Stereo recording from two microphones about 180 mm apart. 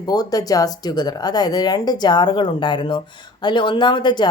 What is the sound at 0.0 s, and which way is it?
Speech, 20° left (ahead or behind).